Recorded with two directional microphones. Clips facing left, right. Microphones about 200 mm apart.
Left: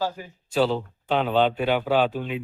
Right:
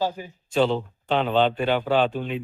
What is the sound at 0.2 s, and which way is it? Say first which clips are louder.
Speech: right 2 dB; 20° right (ahead or behind).